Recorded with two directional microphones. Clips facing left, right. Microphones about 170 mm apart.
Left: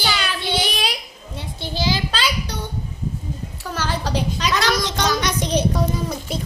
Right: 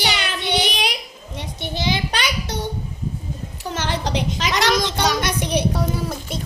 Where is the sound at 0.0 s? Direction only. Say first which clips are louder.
Even; 70° right (ahead or behind).